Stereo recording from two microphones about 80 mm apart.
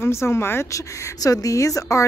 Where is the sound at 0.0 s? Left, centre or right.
Left.